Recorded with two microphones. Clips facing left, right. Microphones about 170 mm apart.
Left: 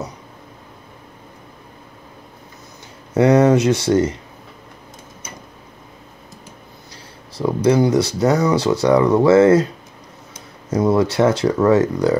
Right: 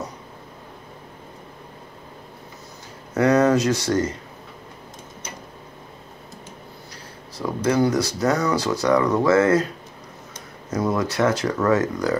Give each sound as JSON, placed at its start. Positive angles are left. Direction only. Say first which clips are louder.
{"t": 3.2, "sound": "speech", "louder": "left 4 dB", "side_deg": 25}
{"t": 7.3, "sound": "speech", "louder": "left 5 dB", "side_deg": 25}
{"t": 10.7, "sound": "speech", "louder": "left 6 dB", "side_deg": 30}